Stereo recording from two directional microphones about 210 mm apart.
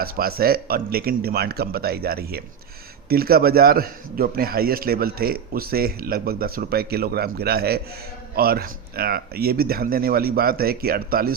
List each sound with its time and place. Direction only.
0.0 s a man's voice: 45° right (ahead or behind)